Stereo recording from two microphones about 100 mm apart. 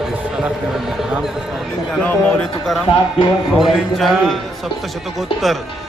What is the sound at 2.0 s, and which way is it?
Speech, 15° left (ahead or behind).